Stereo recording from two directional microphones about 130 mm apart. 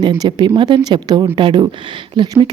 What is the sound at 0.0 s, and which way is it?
A woman's voice, 35° right (ahead or behind).